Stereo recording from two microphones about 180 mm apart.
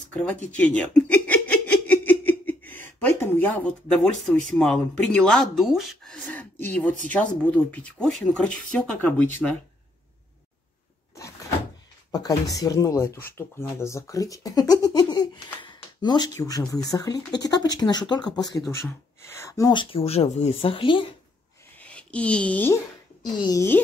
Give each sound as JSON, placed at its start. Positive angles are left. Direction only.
{"t": 0.1, "sound": "speech", "side_deg": 5}
{"t": 0.5, "sound": "a sound", "side_deg": 5}
{"t": 3.2, "sound": "speech", "side_deg": 10}
{"t": 12.1, "sound": "speech", "side_deg": 20}
{"t": 21.7, "sound": "speech", "side_deg": 5}